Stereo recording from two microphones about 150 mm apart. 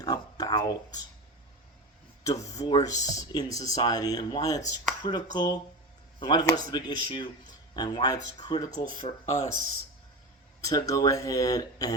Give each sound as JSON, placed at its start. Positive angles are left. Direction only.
{"t": 0.0, "sound": "a sound", "side_deg": 25}
{"t": 2.2, "sound": "speech", "side_deg": 20}
{"t": 8.9, "sound": "speech", "side_deg": 55}
{"t": 10.6, "sound": "speech", "side_deg": 25}